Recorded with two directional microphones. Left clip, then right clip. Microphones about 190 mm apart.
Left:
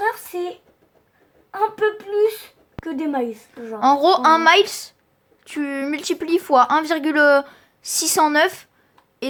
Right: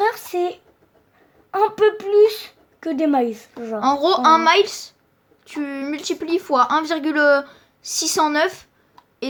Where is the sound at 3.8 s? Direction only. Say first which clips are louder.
Left 2 dB; 15° left (ahead or behind).